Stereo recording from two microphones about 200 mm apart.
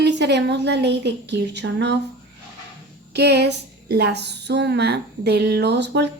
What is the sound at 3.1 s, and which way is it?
A woman's voice, 55° right (ahead or behind).